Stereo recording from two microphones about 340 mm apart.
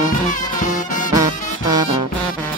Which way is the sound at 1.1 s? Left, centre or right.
Centre.